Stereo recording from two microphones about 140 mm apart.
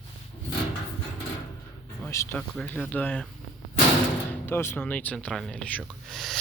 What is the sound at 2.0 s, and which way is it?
Speech, 20° left (ahead or behind).